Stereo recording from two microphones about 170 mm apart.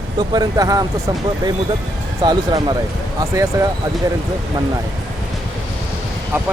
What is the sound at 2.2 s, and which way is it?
Speech, 25° right (ahead or behind).